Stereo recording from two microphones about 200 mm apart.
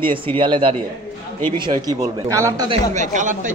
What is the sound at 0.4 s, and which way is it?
A man's voice, 25° right (ahead or behind).